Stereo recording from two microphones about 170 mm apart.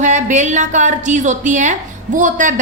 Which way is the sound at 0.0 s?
45° right (ahead or behind).